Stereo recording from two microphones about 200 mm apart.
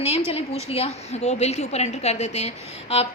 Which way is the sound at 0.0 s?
30° left (ahead or behind).